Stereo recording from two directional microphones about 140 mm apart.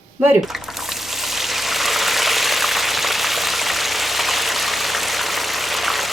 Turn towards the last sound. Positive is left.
turn(degrees=0)  # may be behind; listen again after turning